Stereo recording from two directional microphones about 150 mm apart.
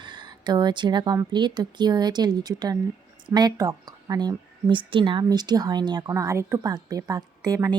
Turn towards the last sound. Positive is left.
turn(degrees=-25)  # may be behind; listen again after turning